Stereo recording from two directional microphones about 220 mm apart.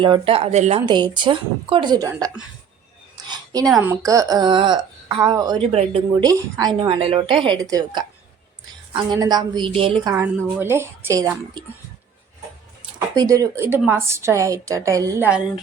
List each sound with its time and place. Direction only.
0.0 s a woman's voice: 25° right (ahead or behind)
3.2 s a sound: 20° right (ahead or behind)
3.8 s a woman's voice: 15° right (ahead or behind)
13.1 s a woman's voice: 15° right (ahead or behind)